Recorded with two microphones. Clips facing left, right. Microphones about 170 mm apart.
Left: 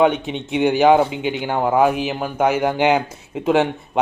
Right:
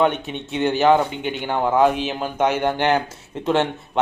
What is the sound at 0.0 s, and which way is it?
Speech, 15° left (ahead or behind).